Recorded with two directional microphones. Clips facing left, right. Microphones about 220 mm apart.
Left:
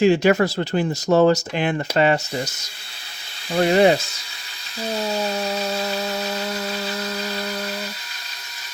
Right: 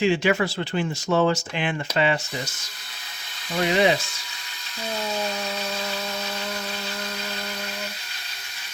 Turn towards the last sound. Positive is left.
turn(degrees=40)  # may be behind; listen again after turning